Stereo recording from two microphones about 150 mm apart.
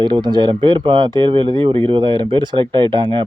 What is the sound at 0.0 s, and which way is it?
Speech, 30° right (ahead or behind).